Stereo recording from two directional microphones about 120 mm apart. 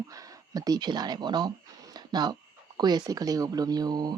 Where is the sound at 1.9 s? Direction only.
35° right (ahead or behind).